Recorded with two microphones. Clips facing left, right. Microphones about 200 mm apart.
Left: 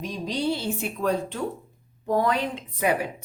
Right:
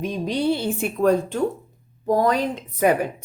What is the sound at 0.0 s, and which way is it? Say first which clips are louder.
Speech: right 5 dB; 55° right (ahead or behind).